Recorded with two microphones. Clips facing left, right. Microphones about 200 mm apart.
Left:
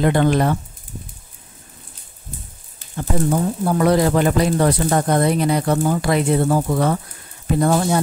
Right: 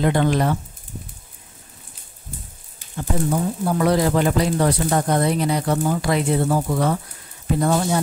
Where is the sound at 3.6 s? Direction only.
55° left (ahead or behind).